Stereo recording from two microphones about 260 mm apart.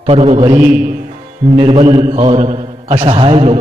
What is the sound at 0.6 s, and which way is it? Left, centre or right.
Speech, centre.